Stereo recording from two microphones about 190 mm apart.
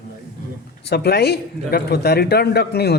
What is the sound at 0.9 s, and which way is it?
A man's voice, 55° left (ahead or behind).